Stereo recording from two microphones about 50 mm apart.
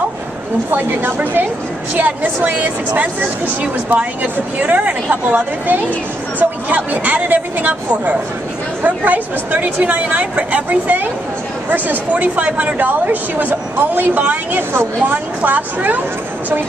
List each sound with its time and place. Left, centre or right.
0.7 s a woman's voice: right